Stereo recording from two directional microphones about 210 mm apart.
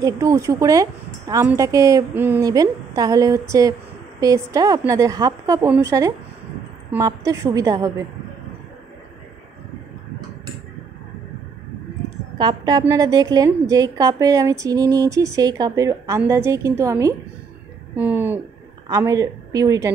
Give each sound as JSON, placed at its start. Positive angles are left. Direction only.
{"t": 0.0, "sound": "a woman's voice", "side_deg": -15}
{"t": 12.4, "sound": "a woman's voice", "side_deg": -20}